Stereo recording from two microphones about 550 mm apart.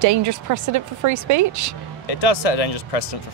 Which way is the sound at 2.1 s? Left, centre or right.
Left.